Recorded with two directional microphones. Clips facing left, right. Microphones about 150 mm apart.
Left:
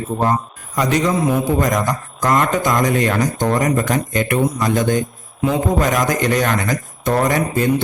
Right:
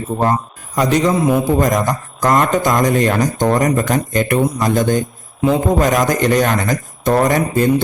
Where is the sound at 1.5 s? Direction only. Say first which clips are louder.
Right 2 dB; 30° right (ahead or behind).